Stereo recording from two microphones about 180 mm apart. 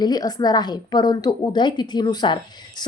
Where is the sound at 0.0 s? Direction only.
20° left (ahead or behind).